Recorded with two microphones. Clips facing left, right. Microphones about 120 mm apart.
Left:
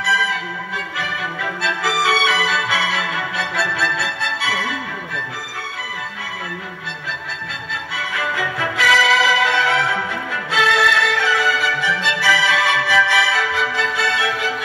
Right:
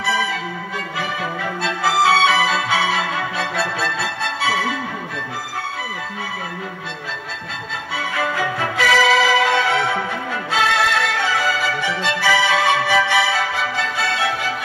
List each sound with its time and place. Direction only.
0.0 s music: 35° right (ahead or behind)
7.7 s music: 40° right (ahead or behind)